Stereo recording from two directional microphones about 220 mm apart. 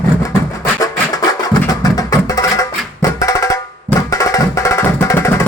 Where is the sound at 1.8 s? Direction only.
15° left (ahead or behind).